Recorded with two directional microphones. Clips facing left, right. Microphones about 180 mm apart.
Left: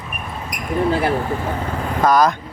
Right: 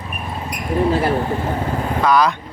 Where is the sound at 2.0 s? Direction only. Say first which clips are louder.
Left 1 dB; 45° left (ahead or behind).